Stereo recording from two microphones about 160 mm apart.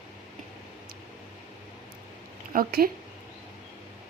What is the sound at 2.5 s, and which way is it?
Speech, 70° right (ahead or behind).